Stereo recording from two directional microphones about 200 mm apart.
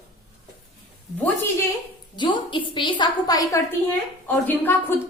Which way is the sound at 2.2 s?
25° left (ahead or behind).